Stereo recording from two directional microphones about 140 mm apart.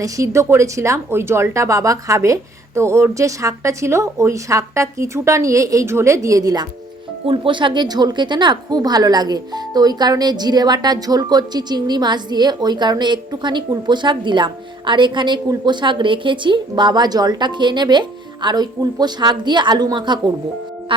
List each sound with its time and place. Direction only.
0.0 s speech: 20° right (ahead or behind)